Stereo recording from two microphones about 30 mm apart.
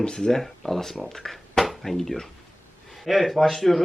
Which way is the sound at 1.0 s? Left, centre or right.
Centre.